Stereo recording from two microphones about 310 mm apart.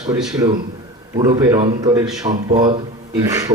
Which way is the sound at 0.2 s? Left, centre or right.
Centre.